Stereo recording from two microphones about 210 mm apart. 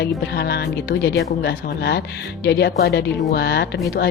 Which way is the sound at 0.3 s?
50° left (ahead or behind).